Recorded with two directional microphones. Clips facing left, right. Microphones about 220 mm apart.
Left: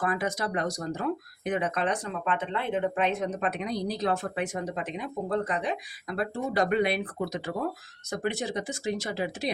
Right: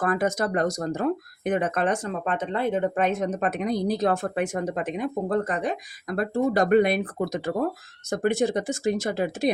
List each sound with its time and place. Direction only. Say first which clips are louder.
0.0 s speech: right 5 dB; 45° right (ahead or behind)